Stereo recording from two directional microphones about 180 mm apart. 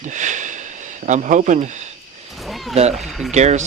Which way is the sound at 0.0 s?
45° right (ahead or behind).